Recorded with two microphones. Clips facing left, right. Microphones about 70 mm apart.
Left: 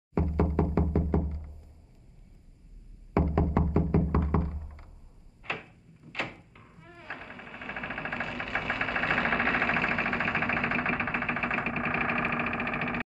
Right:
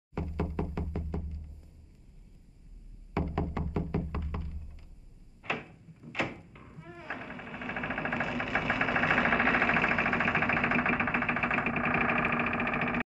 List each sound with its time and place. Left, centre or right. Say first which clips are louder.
0.3 s music: left 7 dB; left
3.2 s music: left 6 dB; left
5.4 s thunk: right 2 dB; centre